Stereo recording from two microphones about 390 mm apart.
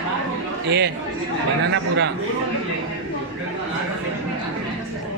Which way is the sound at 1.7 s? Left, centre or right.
Right.